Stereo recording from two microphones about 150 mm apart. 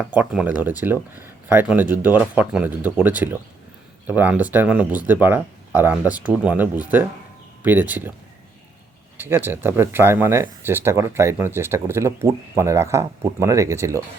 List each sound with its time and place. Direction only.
0.0 s speech: 10° right (ahead or behind)
9.1 s speech: 15° right (ahead or behind)